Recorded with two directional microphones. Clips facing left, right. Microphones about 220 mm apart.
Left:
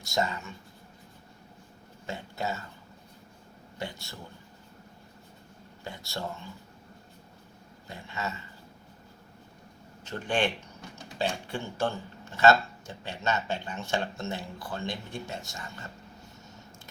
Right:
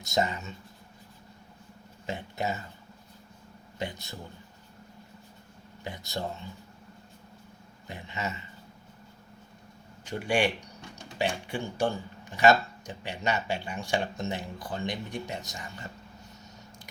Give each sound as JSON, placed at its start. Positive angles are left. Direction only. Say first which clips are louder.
{"t": 0.0, "sound": "speech", "louder": "right 2 dB", "side_deg": -20}
{"t": 2.0, "sound": "speech", "louder": "right 2 dB", "side_deg": -20}
{"t": 3.8, "sound": "speech", "louder": "right 2 dB", "side_deg": -20}
{"t": 5.8, "sound": "speech", "louder": "right 2 dB", "side_deg": -20}
{"t": 7.9, "sound": "speech", "louder": "right 1 dB", "side_deg": -20}
{"t": 10.0, "sound": "speech", "louder": "right 2 dB", "side_deg": -10}